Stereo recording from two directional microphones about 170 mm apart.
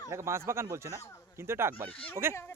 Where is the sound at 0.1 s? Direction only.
15° right (ahead or behind).